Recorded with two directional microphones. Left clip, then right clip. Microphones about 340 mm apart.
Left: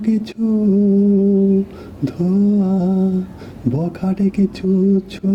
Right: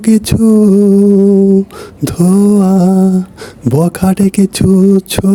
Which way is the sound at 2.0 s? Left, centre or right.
Right.